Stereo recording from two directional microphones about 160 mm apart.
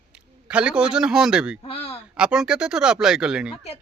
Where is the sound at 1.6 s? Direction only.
40° left (ahead or behind).